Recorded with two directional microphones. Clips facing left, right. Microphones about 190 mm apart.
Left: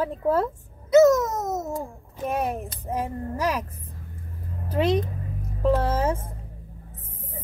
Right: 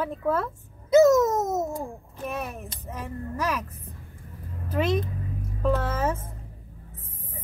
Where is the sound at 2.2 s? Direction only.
35° left (ahead or behind).